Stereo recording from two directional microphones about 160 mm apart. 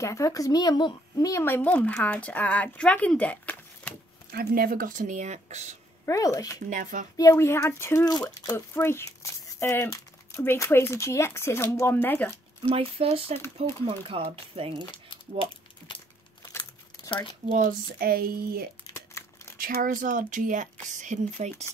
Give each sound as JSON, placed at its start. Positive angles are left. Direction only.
{"t": 0.0, "sound": "speech", "side_deg": 20}
{"t": 4.3, "sound": "speech", "side_deg": -70}
{"t": 6.0, "sound": "speech", "side_deg": 20}
{"t": 6.7, "sound": "speech", "side_deg": -55}
{"t": 7.2, "sound": "speech", "side_deg": 15}
{"t": 12.6, "sound": "speech", "side_deg": -35}
{"t": 17.5, "sound": "speech", "side_deg": -50}
{"t": 17.9, "sound": "speech", "side_deg": -70}
{"t": 19.1, "sound": "crumpling", "side_deg": 15}
{"t": 19.6, "sound": "speech", "side_deg": -60}